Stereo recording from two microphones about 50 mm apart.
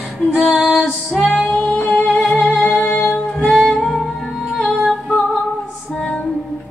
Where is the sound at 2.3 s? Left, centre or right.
Left.